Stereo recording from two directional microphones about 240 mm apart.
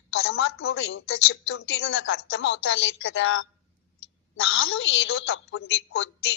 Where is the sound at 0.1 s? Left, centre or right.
Left.